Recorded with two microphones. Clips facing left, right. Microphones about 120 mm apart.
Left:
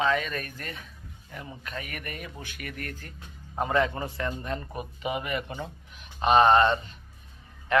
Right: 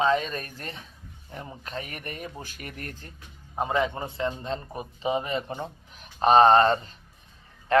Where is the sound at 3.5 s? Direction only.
20° right (ahead or behind).